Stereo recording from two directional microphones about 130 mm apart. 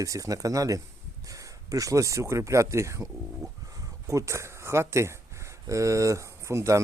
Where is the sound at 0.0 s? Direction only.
25° right (ahead or behind).